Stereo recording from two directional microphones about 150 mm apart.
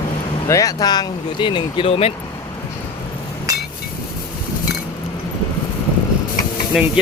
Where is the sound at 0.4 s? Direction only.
20° left (ahead or behind); by 2.1 s 40° left (ahead or behind).